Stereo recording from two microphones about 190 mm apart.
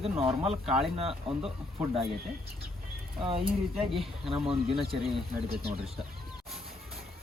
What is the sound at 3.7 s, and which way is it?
Speech, centre (ahead or behind).